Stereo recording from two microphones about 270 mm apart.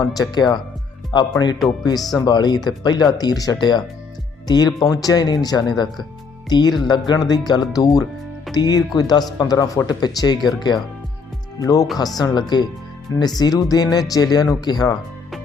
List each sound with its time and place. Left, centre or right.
0.0 s speech: centre